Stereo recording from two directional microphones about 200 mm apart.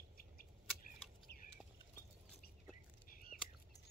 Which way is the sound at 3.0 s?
45° left (ahead or behind).